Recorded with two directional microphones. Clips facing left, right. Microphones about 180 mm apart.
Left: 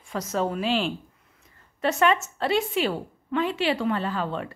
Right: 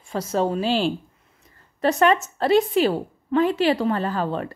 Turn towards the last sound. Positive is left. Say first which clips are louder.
# right 4 dB
turn(degrees=-40)  # may be behind; listen again after turning